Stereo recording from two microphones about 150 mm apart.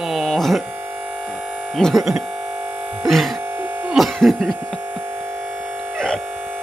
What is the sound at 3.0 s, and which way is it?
Music, centre (ahead or behind).